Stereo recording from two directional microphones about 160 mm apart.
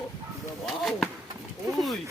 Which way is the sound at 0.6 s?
Centre (ahead or behind).